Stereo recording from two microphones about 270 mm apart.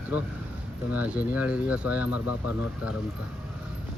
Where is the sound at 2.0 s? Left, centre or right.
Left.